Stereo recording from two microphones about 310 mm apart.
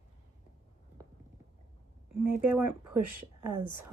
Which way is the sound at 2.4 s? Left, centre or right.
Centre.